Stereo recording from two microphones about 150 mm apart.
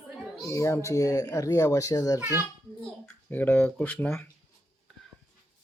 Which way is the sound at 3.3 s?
15° left (ahead or behind).